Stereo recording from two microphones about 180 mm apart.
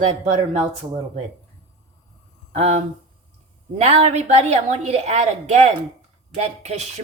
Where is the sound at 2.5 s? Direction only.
35° right (ahead or behind).